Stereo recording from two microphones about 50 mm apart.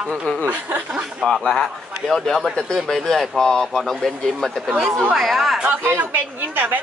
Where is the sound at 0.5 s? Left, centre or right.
Right.